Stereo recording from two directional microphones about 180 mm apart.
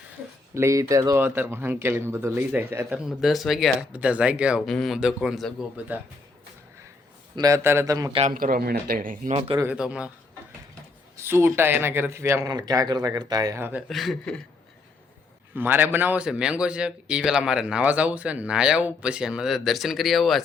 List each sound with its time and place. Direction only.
0.5 s a man's voice: 15° right (ahead or behind)
3.1 s a man's voice: centre (ahead or behind)
7.3 s a man's voice: 20° right (ahead or behind)
8.3 s speech: 55° right (ahead or behind)
9.6 s a man's voice: 5° right (ahead or behind)
11.2 s a man's voice: 15° right (ahead or behind)
13.8 s a man's voice: centre (ahead or behind)
15.5 s a man's voice: 10° right (ahead or behind)